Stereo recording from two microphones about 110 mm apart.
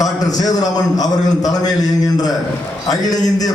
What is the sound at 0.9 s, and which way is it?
A man's voice, 35° left (ahead or behind).